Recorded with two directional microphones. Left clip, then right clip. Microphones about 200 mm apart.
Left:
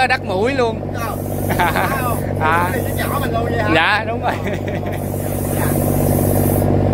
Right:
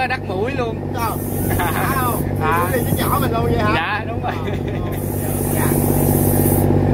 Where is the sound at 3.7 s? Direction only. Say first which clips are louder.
Left 5 dB; 35° left (ahead or behind).